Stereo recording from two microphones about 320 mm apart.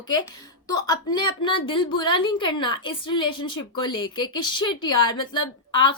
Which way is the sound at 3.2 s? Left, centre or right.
Left.